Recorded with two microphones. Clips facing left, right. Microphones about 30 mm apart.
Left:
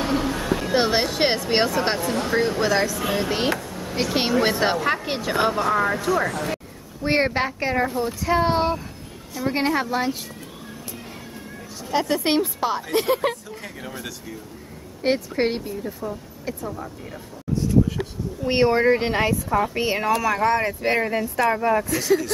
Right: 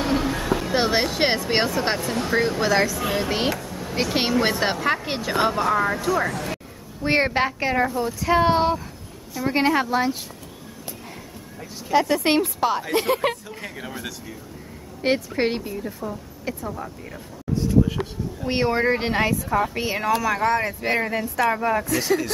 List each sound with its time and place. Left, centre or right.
0.0 s a woman's voice: centre
11.9 s a woman's voice: centre
13.2 s speech: centre
18.4 s speech: centre